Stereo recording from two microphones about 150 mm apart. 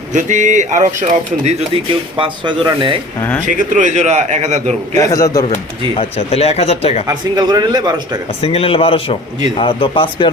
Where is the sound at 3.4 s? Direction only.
55° right (ahead or behind).